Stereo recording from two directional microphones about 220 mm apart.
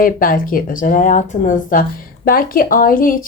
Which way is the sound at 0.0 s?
40° left (ahead or behind).